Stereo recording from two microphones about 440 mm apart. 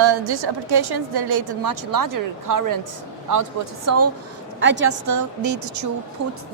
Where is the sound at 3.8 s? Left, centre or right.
Right.